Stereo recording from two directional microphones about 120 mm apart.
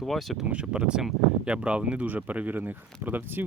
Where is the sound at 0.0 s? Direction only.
Centre (ahead or behind).